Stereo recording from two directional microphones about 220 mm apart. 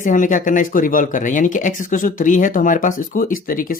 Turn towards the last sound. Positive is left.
turn(degrees=40)  # may be behind; listen again after turning